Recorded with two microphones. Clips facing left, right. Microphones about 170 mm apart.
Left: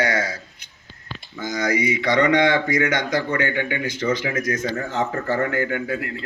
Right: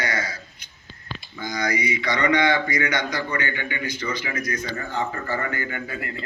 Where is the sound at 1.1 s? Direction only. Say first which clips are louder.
Left 4 dB; 85° left.